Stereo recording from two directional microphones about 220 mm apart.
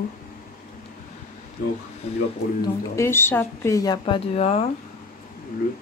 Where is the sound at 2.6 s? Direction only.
10° left (ahead or behind); by 4.6 s 30° left (ahead or behind).